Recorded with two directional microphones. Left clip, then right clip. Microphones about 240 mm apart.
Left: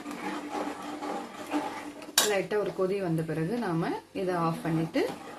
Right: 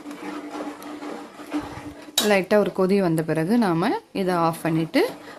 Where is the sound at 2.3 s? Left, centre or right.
Right.